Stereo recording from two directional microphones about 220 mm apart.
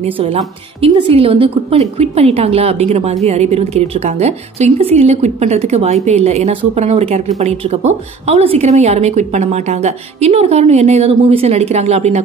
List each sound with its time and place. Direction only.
0.0 s a woman's voice: 30° right (ahead or behind)